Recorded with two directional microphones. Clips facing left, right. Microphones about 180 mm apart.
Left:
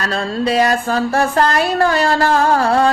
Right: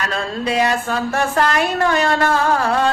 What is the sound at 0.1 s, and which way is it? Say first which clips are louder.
Mantra: left 4 dB; 35° left (ahead or behind).